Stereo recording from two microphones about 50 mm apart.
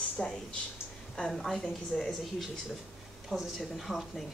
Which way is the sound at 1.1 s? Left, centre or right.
Centre.